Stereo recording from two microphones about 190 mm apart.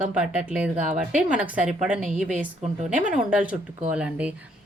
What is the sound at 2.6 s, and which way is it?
Speech, 40° right (ahead or behind).